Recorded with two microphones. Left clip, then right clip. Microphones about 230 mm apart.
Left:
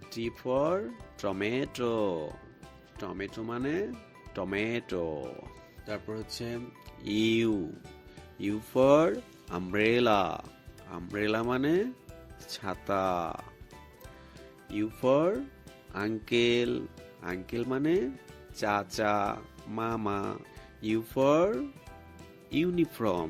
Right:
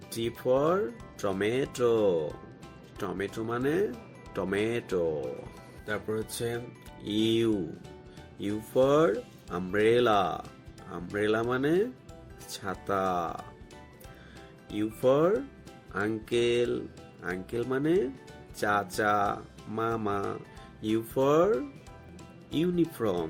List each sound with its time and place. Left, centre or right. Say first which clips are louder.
0.2 s speech: right 3 dB; left
7.0 s speech: right 1 dB; left
14.8 s speech: right 2 dB; left